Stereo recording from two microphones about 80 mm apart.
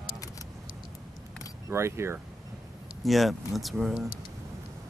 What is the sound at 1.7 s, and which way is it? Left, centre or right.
Speech, right.